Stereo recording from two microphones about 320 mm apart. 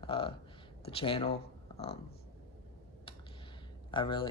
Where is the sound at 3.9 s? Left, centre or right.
Centre.